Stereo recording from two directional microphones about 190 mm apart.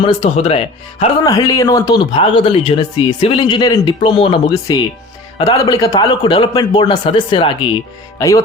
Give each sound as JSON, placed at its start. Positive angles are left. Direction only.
{"t": 0.0, "sound": "speech", "side_deg": 30}
{"t": 1.2, "sound": "speech", "side_deg": 20}